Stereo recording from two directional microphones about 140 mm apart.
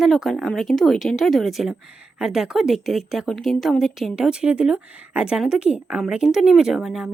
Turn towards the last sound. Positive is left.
turn(degrees=0)  # may be behind; listen again after turning